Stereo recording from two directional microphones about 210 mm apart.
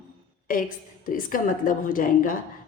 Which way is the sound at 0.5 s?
40° left (ahead or behind).